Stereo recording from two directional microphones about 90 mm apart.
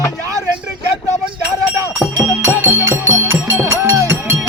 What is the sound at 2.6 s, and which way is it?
Music, 25° right (ahead or behind).